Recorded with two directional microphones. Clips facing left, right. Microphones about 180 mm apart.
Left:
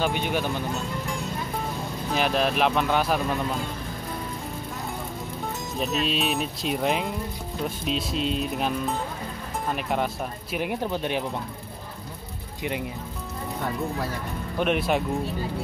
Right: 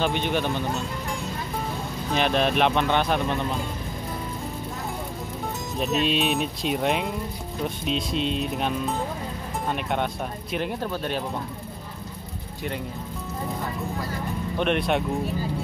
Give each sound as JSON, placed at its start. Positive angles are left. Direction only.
{"t": 0.0, "sound": "speech", "side_deg": 10}
{"t": 5.8, "sound": "speech", "side_deg": 0}
{"t": 14.6, "sound": "speech", "side_deg": 5}